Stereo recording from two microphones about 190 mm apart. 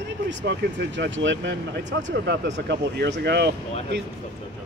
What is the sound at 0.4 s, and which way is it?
Speech, 70° right (ahead or behind).